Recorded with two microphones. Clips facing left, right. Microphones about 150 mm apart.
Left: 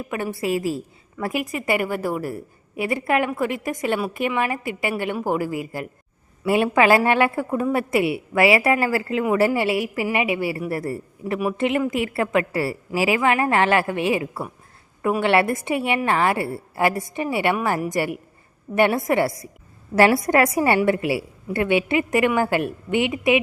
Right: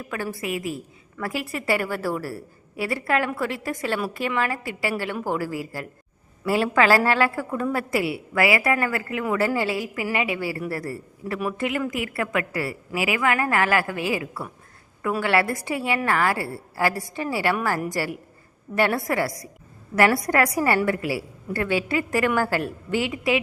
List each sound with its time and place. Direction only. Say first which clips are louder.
0.0 s a woman's voice: left 4 dB; 20° left (ahead or behind)
1.2 s a woman's voice: left 3 dB; 20° left (ahead or behind)